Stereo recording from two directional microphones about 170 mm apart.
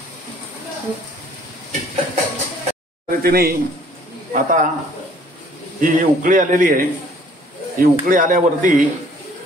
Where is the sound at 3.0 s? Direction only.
60° right (ahead or behind).